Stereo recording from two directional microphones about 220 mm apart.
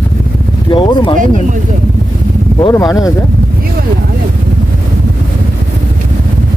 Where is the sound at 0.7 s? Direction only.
20° left (ahead or behind).